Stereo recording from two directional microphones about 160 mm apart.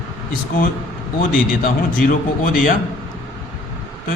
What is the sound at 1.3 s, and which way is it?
Speech, 60° left (ahead or behind).